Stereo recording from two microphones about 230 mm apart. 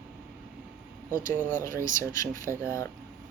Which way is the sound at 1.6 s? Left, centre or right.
Centre.